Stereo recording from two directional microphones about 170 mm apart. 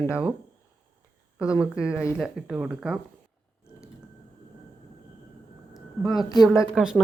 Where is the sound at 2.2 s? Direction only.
5° right (ahead or behind).